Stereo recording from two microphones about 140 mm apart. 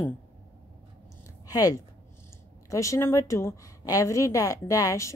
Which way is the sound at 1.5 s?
25° left (ahead or behind).